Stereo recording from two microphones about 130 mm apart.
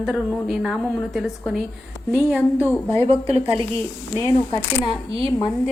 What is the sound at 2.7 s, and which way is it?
Speech, 15° left (ahead or behind).